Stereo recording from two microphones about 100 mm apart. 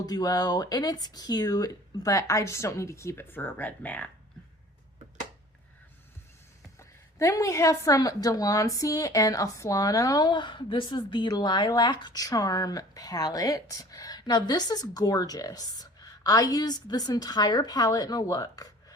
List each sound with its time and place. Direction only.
0.0 s a woman's voice: 40° left (ahead or behind); by 4.1 s 15° left (ahead or behind)
6.7 s a woman's voice: 30° left (ahead or behind)